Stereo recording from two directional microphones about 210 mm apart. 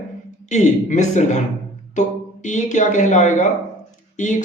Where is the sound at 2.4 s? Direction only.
35° left (ahead or behind).